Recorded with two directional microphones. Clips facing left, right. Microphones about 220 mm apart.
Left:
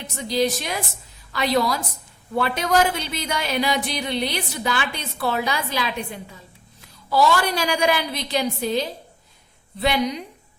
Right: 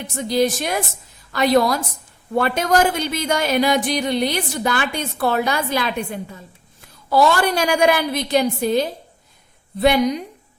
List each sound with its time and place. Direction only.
0.2 s speech: 50° right (ahead or behind)
7.1 s speech: 50° right (ahead or behind)